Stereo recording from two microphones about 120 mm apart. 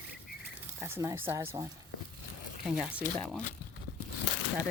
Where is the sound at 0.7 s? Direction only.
20° right (ahead or behind).